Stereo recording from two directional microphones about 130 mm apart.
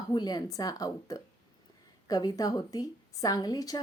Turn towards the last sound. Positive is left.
turn(degrees=30)  # may be behind; listen again after turning